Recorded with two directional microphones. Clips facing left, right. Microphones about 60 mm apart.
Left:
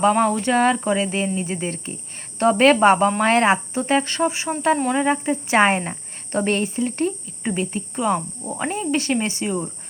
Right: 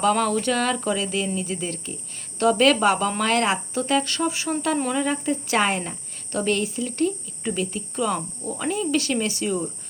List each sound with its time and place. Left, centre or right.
0.0 s a woman's voice: left